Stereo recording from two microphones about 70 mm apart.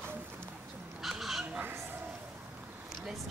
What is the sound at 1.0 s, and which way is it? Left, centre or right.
Fowl, centre.